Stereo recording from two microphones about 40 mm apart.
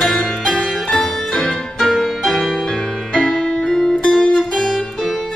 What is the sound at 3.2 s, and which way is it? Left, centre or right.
Music, left.